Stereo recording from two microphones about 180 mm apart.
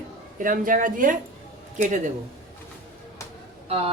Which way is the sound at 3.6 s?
30° right (ahead or behind).